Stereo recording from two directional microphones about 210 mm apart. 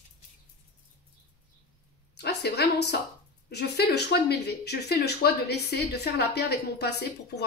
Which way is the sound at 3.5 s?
55° left (ahead or behind).